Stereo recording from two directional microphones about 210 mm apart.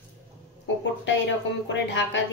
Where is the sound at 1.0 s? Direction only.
60° left (ahead or behind).